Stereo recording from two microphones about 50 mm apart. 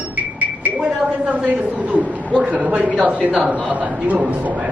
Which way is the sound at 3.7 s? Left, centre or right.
Right.